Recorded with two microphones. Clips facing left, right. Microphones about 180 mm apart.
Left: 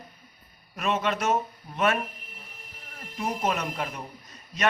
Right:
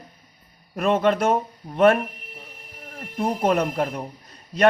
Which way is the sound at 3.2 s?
55° right (ahead or behind).